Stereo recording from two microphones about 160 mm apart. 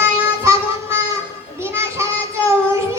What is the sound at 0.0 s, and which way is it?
Child singing, 15° right (ahead or behind).